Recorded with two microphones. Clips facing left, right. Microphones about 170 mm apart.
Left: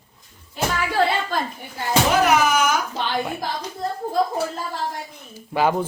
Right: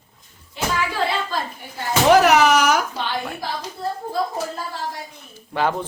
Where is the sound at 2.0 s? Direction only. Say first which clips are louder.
Right 6 dB; 70° right (ahead or behind).